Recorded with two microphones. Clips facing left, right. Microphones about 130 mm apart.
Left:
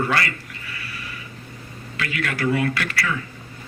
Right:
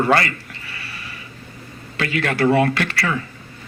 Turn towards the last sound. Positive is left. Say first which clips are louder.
# right 3 dB
turn(degrees=-30)  # may be behind; listen again after turning